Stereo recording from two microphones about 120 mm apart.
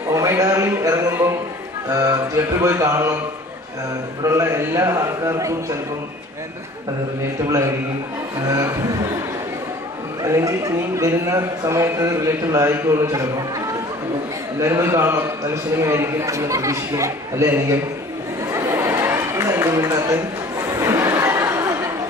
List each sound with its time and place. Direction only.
0.1 s a man's voice: 25° right (ahead or behind)
4.2 s a man's voice: 25° right (ahead or behind)
7.4 s a man's voice: 25° right (ahead or behind)
10.2 s a man's voice: 25° right (ahead or behind)
14.6 s a man's voice: 25° right (ahead or behind)
18.5 s a sound: 25° right (ahead or behind)